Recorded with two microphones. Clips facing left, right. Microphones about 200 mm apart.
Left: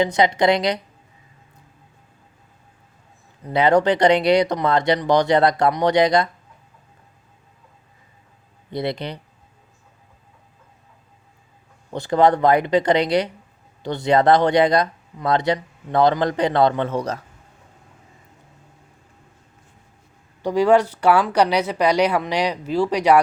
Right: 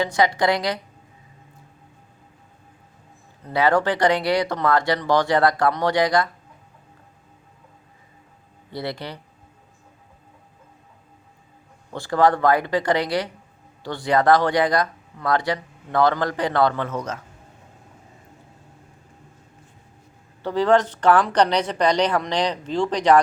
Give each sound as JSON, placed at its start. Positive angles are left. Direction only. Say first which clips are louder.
{"t": 0.0, "sound": "speech", "louder": "left 3 dB", "side_deg": 20}
{"t": 3.4, "sound": "speech", "louder": "left 3 dB", "side_deg": 20}
{"t": 8.7, "sound": "speech", "louder": "left 4 dB", "side_deg": 20}
{"t": 11.9, "sound": "speech", "louder": "left 2 dB", "side_deg": 20}
{"t": 20.4, "sound": "speech", "louder": "left 2 dB", "side_deg": 10}